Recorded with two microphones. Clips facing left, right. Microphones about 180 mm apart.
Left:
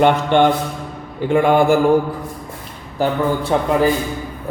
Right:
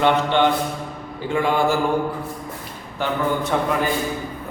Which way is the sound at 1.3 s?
55° left (ahead or behind).